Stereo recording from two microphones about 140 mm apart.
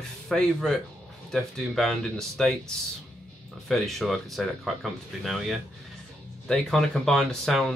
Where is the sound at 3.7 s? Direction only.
Centre (ahead or behind).